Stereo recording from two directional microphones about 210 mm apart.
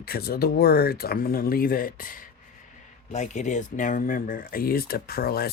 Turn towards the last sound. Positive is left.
turn(degrees=45)  # may be behind; listen again after turning